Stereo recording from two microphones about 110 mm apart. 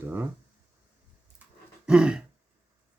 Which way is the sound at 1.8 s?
10° right (ahead or behind).